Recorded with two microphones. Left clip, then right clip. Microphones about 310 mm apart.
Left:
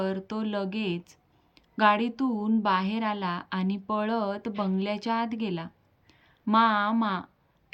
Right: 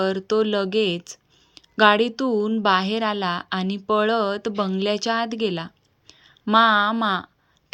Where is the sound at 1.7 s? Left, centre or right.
Centre.